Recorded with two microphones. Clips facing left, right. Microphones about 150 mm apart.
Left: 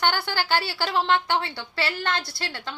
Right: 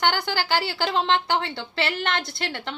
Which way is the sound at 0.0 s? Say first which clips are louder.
Right 1 dB; 15° right (ahead or behind).